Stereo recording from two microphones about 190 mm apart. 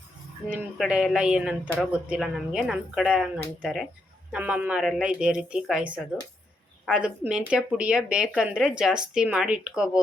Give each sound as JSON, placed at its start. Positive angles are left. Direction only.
{"t": 0.5, "sound": "speech", "side_deg": -5}